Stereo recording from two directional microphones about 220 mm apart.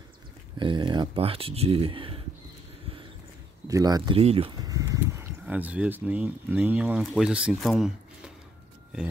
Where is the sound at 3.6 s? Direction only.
15° right (ahead or behind).